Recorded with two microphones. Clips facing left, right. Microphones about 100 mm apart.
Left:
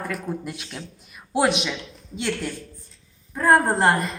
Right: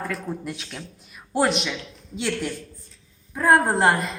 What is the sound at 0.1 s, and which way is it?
A woman's voice, 5° left (ahead or behind).